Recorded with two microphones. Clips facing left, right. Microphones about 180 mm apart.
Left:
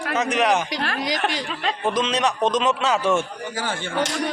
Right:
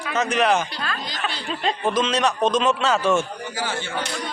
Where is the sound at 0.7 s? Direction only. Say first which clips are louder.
Left 5 dB; 80° left.